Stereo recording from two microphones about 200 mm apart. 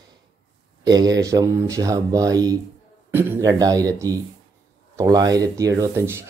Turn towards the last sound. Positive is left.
turn(degrees=-15)  # may be behind; listen again after turning